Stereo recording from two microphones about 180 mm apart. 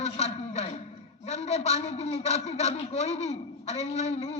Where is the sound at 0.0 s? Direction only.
35° left (ahead or behind).